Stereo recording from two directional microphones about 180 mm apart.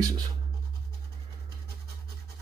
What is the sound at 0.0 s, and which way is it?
Scratch, 20° right (ahead or behind).